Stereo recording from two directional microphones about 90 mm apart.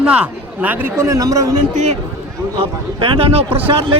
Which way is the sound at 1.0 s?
40° right (ahead or behind).